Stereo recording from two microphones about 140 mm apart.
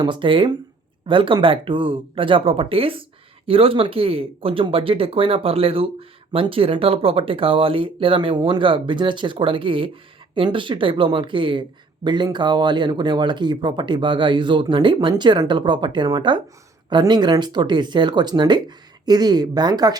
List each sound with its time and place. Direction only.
0.0 s speech: 35° right (ahead or behind)